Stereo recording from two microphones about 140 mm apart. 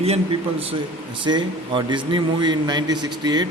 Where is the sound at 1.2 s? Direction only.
35° right (ahead or behind).